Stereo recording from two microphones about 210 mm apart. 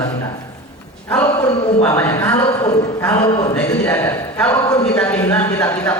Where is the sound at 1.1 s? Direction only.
10° left (ahead or behind).